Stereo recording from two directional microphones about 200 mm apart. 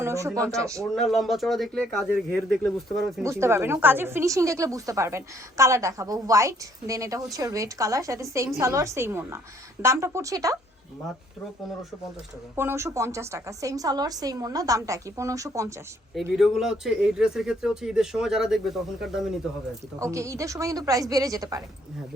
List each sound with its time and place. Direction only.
0.0 s speech: 15° right (ahead or behind)
1.1 s speech: centre (ahead or behind)
3.2 s a woman's voice: 15° right (ahead or behind)
12.5 s a woman's voice: 15° right (ahead or behind)
16.1 s speech: centre (ahead or behind)
20.0 s a woman's voice: 15° right (ahead or behind)